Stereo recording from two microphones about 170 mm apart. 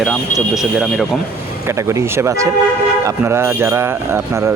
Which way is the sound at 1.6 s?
15° right (ahead or behind).